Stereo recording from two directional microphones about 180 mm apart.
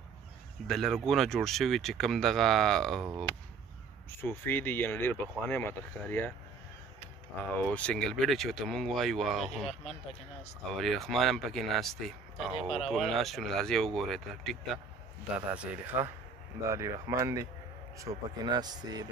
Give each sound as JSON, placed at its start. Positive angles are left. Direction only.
{"t": 0.7, "sound": "speech", "side_deg": 0}
{"t": 4.2, "sound": "speech", "side_deg": 10}
{"t": 7.5, "sound": "speech", "side_deg": 5}
{"t": 10.8, "sound": "speech", "side_deg": 0}